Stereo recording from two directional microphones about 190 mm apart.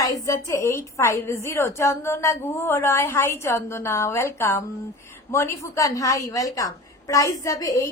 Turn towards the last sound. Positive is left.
turn(degrees=15)  # may be behind; listen again after turning